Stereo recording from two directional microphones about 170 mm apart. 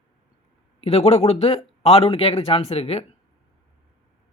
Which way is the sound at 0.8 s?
40° left (ahead or behind).